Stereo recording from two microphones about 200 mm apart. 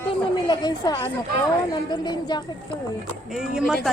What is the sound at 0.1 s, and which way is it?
Chatter, 20° left (ahead or behind).